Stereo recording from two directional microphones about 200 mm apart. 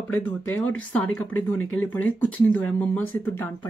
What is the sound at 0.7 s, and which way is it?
Speech, 5° left (ahead or behind).